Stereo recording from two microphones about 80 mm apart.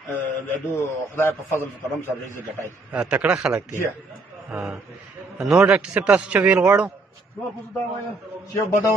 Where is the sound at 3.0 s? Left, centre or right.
Centre.